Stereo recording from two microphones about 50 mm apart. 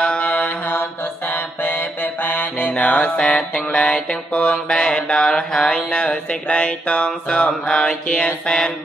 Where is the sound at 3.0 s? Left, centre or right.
Centre.